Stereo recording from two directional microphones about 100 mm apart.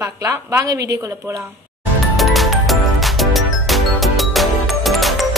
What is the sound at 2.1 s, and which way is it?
Music, centre (ahead or behind).